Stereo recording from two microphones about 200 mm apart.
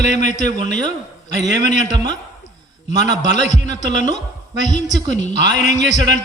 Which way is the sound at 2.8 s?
35° left (ahead or behind).